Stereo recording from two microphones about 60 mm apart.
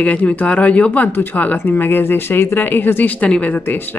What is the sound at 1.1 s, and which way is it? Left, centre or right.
Speech, left.